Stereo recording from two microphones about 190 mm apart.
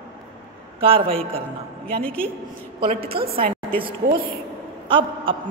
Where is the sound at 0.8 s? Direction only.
30° right (ahead or behind).